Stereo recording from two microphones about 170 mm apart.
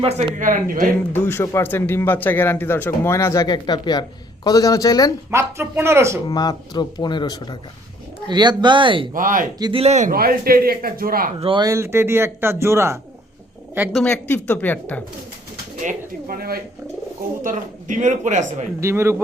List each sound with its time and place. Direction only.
0.0 s speech: 35° right (ahead or behind); by 0.9 s 55° right (ahead or behind)
1.1 s speech: 15° left (ahead or behind)
5.3 s speech: 15° right (ahead or behind)
6.2 s speech: 25° left (ahead or behind)
8.3 s speech: 25° right (ahead or behind)
9.1 s speech: 50° right (ahead or behind)
9.6 s speech: 25° right (ahead or behind)
9.8 s a man's voice: 40° right (ahead or behind)
10.1 s a man's voice: 60° right (ahead or behind)
11.3 s speech: 30° right (ahead or behind); by 14.0 s 10° right (ahead or behind)
14.0 s speech: 10° left (ahead or behind)
15.8 s a man's voice: 50° right (ahead or behind)
17.4 s speech: 50° right (ahead or behind)
18.8 s speech: 15° right (ahead or behind)